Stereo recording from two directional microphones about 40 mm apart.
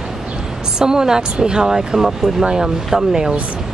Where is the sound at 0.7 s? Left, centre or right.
Centre.